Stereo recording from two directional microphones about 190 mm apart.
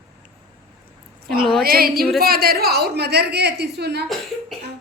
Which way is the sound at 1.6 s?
50° right (ahead or behind).